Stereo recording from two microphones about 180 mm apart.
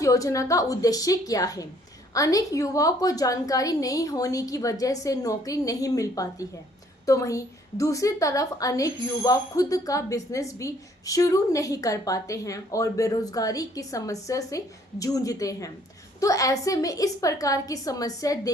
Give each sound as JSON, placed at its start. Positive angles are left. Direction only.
{"t": 0.0, "sound": "a woman's voice", "side_deg": 20}